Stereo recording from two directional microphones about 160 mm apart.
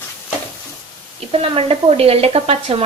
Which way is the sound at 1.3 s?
35° right (ahead or behind).